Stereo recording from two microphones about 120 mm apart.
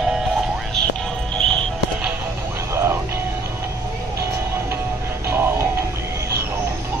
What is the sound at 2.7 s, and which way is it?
Music, 20° right (ahead or behind).